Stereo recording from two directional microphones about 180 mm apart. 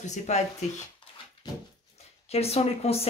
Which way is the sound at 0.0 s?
40° left (ahead or behind).